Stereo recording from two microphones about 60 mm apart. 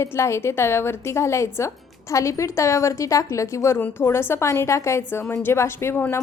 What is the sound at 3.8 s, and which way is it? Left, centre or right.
A woman's voice, left.